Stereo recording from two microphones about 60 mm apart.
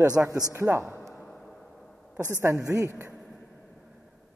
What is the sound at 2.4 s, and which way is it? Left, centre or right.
Speech, right.